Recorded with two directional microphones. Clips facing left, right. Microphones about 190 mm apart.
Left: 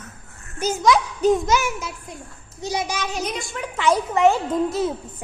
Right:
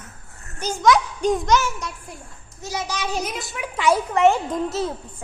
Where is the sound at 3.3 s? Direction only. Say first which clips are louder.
Left 1 dB; 5° right (ahead or behind).